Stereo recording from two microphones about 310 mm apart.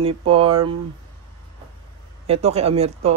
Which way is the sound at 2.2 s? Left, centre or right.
Centre.